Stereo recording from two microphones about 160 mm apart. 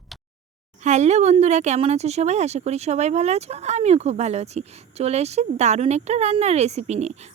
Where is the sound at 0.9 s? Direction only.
45° right (ahead or behind).